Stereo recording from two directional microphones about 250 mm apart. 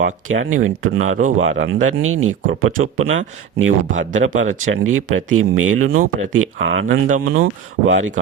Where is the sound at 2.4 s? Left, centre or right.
Right.